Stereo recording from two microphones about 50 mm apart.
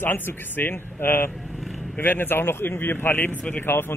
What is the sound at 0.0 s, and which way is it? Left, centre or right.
A man's voice, left.